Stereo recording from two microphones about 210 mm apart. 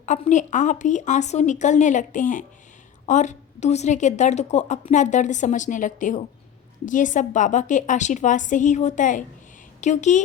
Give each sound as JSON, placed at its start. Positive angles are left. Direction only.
{"t": 0.0, "sound": "a woman's voice", "side_deg": 35}